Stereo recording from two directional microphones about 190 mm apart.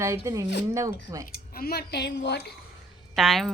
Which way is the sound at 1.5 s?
55° left (ahead or behind).